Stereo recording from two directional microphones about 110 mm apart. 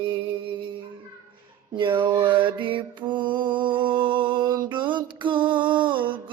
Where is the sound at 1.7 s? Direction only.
45° right (ahead or behind).